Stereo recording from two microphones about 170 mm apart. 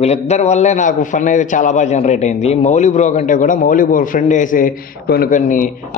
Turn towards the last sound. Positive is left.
turn(degrees=50)  # may be behind; listen again after turning